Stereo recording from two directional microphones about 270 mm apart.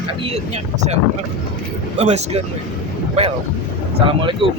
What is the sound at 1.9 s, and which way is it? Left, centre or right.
Speech, right.